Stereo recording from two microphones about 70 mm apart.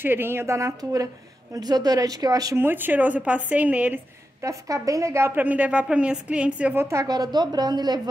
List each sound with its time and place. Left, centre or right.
0.0 s a woman's voice: right
1.5 s a woman's voice: right
2.5 s a woman's voice: right
4.4 s a woman's voice: right
5.3 s a woman's voice: right
6.7 s a woman's voice: right
7.3 s a woman's voice: right